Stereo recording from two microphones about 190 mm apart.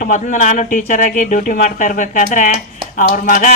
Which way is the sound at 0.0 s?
40° left (ahead or behind).